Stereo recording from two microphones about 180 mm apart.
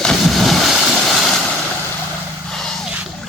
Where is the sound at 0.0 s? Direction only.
Centre (ahead or behind).